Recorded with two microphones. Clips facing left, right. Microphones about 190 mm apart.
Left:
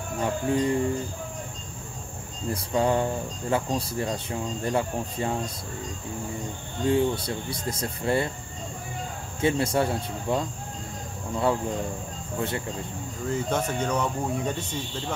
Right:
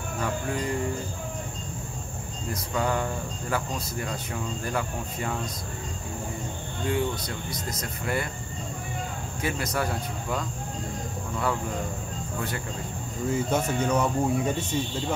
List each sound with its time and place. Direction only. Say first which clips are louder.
0.2 s speech: left 5 dB; 25° left (ahead or behind)
2.5 s speech: left 4 dB; 30° left (ahead or behind)
6.9 s speech: left 5 dB; 30° left (ahead or behind)
9.4 s speech: left 6 dB; 30° left (ahead or behind)
12.4 s speech: left 4 dB; 25° left (ahead or behind)
13.3 s speech: right 1 dB; 10° right (ahead or behind)